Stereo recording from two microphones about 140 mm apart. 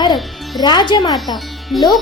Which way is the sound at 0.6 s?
30° left (ahead or behind).